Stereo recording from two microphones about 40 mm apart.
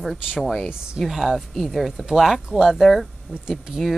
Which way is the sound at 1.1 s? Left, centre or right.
Centre.